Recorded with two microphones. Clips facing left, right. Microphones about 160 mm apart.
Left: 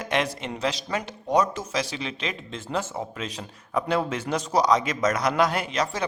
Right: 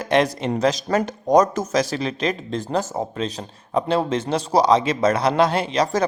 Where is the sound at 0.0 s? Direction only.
35° right (ahead or behind).